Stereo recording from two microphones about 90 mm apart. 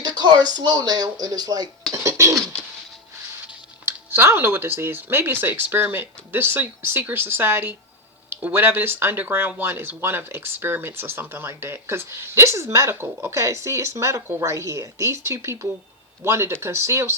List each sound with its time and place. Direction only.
0.0 s speech: 50° right (ahead or behind)
1.9 s cough: 35° right (ahead or behind)
3.8 s speech: 25° right (ahead or behind)